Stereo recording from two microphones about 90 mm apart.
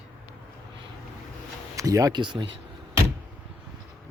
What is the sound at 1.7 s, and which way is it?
Speech, 40° right (ahead or behind).